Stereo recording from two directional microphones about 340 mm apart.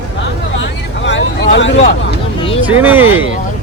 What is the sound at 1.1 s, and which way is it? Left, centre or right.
Vehicle, left.